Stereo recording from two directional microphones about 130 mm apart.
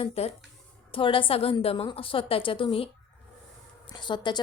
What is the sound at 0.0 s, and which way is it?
A woman's voice, 50° left (ahead or behind).